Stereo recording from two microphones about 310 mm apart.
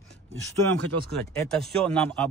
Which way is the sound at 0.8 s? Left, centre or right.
Right.